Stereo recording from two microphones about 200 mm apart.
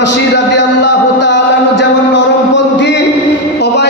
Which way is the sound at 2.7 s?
65° left (ahead or behind).